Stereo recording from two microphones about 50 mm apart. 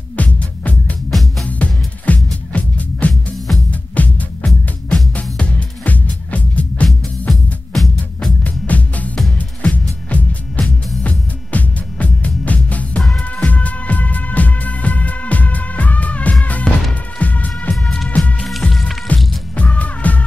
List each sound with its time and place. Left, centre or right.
0.1 s music: left
3.3 s music: centre
3.9 s music: left
6.9 s music: centre
8.5 s music: left
17.8 s music: centre
19.5 s music: left